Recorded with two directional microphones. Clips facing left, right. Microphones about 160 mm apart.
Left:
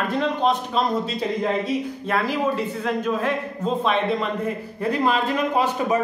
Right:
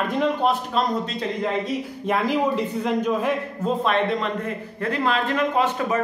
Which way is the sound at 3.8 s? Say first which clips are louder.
Even; centre (ahead or behind).